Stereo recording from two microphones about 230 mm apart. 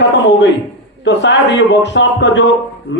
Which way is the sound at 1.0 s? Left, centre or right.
Left.